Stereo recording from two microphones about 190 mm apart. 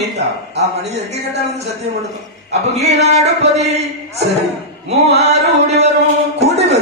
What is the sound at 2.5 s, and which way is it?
Speech, 35° right (ahead or behind).